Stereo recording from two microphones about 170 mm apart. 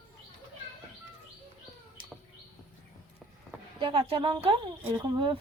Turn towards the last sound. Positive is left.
turn(degrees=-30)  # may be behind; listen again after turning